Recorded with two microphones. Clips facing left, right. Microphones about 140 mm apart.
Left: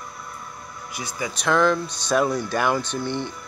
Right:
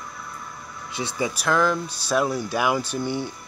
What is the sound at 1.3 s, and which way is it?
Speech, 5° right (ahead or behind).